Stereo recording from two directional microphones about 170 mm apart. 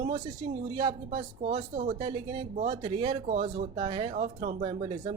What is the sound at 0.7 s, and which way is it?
Speech, 30° right (ahead or behind).